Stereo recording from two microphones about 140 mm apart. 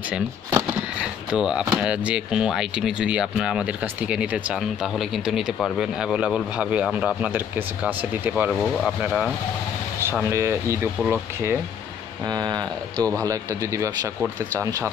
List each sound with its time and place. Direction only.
0.5 s a sound: 20° right (ahead or behind)
1.3 s speech: 5° right (ahead or behind)
10.3 s a man's voice: 20° right (ahead or behind)
12.3 s a man's voice: 25° right (ahead or behind)